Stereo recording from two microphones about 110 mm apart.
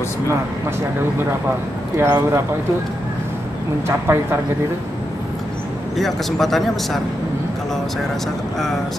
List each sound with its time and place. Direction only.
2.0 s speech: 20° right (ahead or behind)
3.8 s speech: 25° right (ahead or behind)
5.9 s a man's voice: centre (ahead or behind)